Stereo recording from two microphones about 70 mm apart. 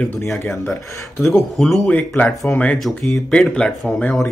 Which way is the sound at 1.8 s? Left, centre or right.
Left.